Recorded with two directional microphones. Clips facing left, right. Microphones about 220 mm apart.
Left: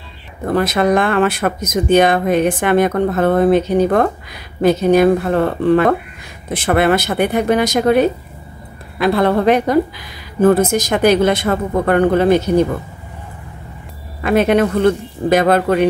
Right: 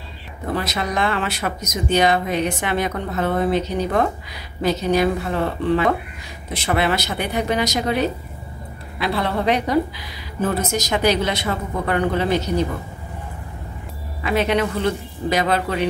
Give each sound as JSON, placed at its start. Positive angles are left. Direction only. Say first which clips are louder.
{"t": 0.5, "sound": "speech", "louder": "left 10 dB", "side_deg": 50}
{"t": 14.2, "sound": "speech", "louder": "left 7 dB", "side_deg": 50}